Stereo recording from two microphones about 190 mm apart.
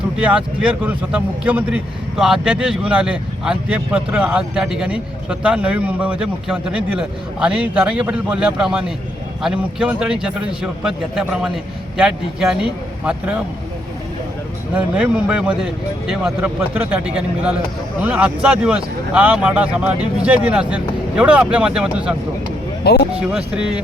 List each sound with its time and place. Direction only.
0.2 s a man's voice: 5° right (ahead or behind)
14.7 s a man's voice: 5° right (ahead or behind)
22.8 s speech: 55° left (ahead or behind)
23.3 s a man's voice: 5° right (ahead or behind)